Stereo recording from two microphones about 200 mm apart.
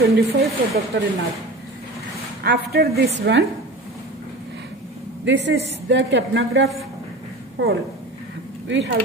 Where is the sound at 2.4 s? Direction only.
55° right (ahead or behind).